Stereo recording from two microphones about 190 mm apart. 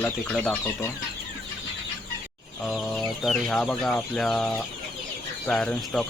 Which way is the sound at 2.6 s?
Centre (ahead or behind).